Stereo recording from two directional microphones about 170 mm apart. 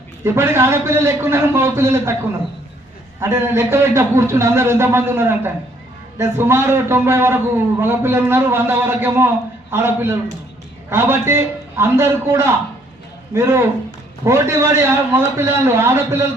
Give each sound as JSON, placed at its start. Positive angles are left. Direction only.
{"t": 0.3, "sound": "a man's voice", "side_deg": -15}
{"t": 3.2, "sound": "a man's voice", "side_deg": -15}